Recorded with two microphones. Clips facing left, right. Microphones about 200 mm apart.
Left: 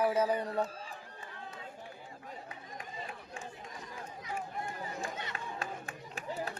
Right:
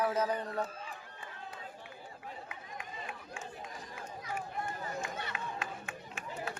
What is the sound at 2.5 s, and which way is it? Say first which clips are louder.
Chatter: even; 35° left (ahead or behind).